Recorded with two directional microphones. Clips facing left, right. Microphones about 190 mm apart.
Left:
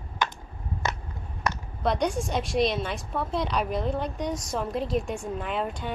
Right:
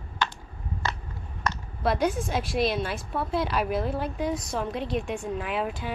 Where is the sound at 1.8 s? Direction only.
5° right (ahead or behind).